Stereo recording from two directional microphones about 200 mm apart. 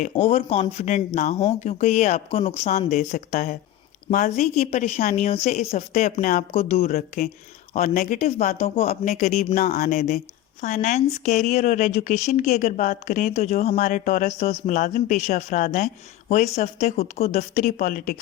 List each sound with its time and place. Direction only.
0.3 s speech: 30° left (ahead or behind)